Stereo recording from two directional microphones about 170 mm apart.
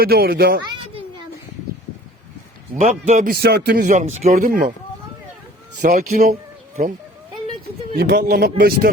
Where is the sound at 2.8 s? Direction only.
50° right (ahead or behind).